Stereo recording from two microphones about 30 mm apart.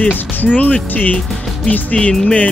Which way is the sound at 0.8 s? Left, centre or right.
Left.